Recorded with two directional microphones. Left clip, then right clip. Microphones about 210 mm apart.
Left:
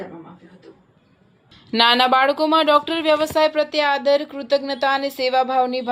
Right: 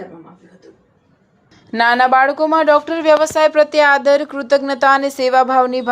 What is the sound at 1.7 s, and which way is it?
Speech, 5° right (ahead or behind).